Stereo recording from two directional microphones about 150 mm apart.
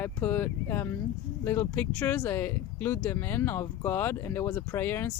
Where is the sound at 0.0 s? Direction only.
10° left (ahead or behind).